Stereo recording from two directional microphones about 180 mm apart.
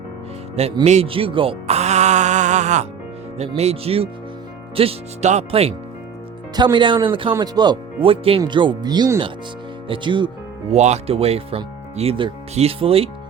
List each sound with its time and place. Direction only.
0.9 s speech: 35° right (ahead or behind)
10.8 s speech: 40° right (ahead or behind)